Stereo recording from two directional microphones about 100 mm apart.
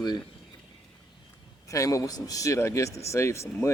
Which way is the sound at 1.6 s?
30° left (ahead or behind).